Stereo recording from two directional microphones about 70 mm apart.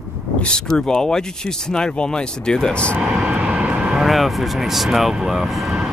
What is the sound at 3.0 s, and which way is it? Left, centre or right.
Vehicle, centre.